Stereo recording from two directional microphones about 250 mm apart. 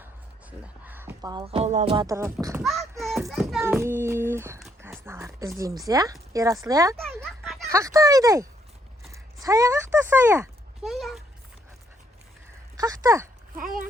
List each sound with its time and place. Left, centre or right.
0.6 s speech: centre
3.0 s a child's voice: centre
7.3 s a sound: centre
7.7 s speech: centre
12.7 s speech: centre
13.6 s a child's voice: right